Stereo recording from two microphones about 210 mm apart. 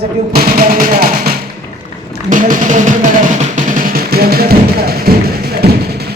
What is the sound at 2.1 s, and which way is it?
Music, 40° right (ahead or behind).